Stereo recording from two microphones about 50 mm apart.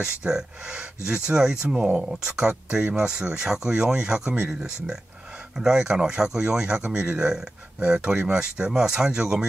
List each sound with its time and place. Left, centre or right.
0.0 s speech: centre
5.6 s speech: centre